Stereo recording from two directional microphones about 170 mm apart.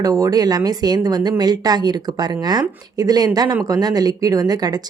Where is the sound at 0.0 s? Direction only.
20° right (ahead or behind).